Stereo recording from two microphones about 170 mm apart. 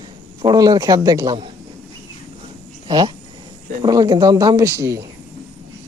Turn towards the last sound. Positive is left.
turn(degrees=-20)  # may be behind; listen again after turning